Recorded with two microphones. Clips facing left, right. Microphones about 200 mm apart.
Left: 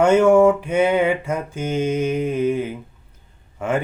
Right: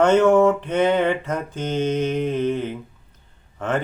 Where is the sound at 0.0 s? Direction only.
10° left (ahead or behind).